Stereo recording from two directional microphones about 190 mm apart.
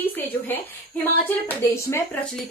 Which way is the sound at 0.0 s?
10° left (ahead or behind).